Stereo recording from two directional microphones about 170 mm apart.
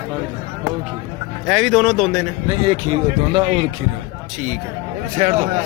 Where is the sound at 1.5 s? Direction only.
Centre (ahead or behind).